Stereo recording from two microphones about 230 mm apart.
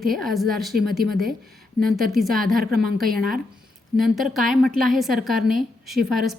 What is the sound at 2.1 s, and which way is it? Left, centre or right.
Speech, centre.